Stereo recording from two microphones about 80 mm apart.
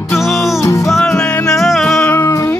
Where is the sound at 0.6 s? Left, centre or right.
Left.